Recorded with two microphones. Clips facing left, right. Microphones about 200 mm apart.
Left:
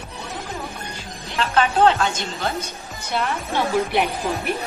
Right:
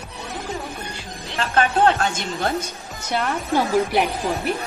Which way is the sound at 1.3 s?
45° right (ahead or behind).